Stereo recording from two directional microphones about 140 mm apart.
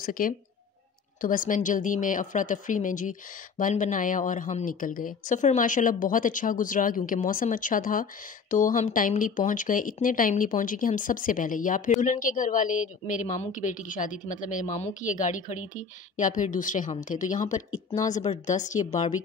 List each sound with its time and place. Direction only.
0.0 s speech: 85° left
1.2 s speech: 75° left (ahead or behind)
4.7 s a woman's voice: 80° left; by 19.1 s 55° left (ahead or behind)